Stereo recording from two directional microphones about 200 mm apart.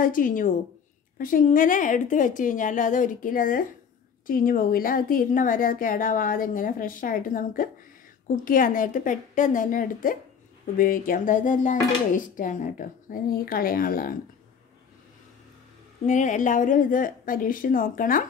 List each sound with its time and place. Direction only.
0.0 s a woman's voice: 45° left (ahead or behind)
16.1 s speech: 40° left (ahead or behind)